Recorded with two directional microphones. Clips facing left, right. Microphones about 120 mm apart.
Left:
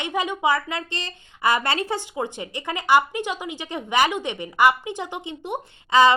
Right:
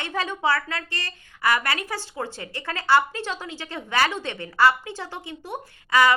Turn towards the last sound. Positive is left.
turn(degrees=20)  # may be behind; listen again after turning